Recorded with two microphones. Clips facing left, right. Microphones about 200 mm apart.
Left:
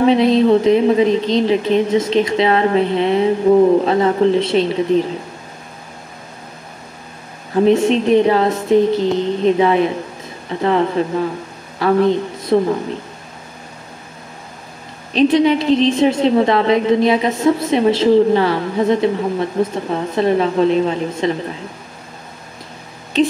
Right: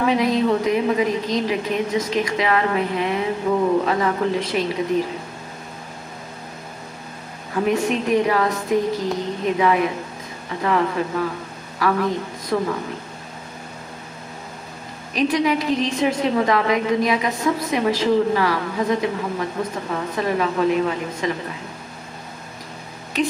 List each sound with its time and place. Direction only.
0.0 s a woman's voice: 30° left (ahead or behind)
7.5 s a woman's voice: 25° left (ahead or behind)
15.1 s a woman's voice: 25° left (ahead or behind)
23.2 s speech: 25° left (ahead or behind)